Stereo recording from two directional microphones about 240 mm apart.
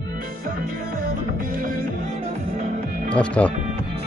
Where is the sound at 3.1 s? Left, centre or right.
Centre.